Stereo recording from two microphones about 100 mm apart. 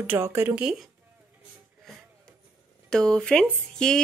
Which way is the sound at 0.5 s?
5° right (ahead or behind).